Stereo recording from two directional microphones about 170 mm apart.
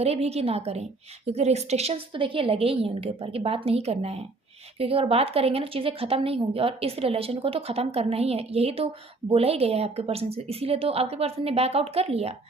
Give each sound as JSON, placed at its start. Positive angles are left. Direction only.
{"t": 0.0, "sound": "a woman's voice", "side_deg": -40}